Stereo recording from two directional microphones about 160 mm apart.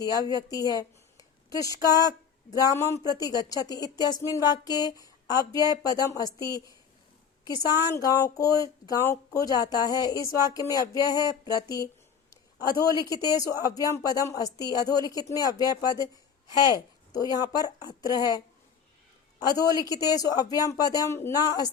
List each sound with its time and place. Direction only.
0.5 s speech: 25° left (ahead or behind)
19.5 s speech: 25° left (ahead or behind)